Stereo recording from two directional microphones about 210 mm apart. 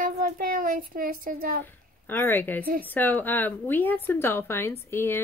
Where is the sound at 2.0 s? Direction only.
10° left (ahead or behind).